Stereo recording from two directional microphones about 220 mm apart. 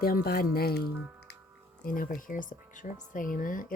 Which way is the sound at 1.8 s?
40° left (ahead or behind).